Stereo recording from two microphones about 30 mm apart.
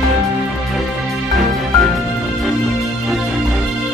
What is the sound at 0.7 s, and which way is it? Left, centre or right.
Music, centre.